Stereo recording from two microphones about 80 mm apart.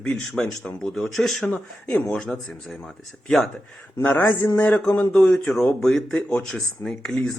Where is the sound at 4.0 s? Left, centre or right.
Left.